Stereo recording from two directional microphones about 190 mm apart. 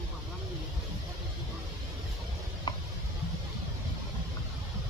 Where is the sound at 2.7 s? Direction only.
25° left (ahead or behind).